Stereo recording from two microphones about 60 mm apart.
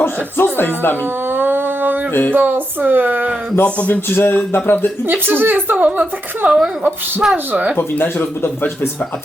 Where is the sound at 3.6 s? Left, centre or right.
Left.